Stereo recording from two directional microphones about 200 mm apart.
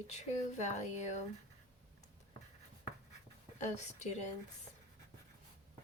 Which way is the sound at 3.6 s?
35° left (ahead or behind).